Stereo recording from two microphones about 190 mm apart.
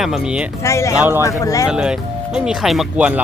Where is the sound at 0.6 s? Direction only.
15° left (ahead or behind).